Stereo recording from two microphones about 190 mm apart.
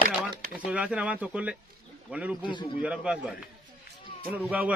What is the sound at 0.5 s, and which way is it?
Speech, 5° right (ahead or behind).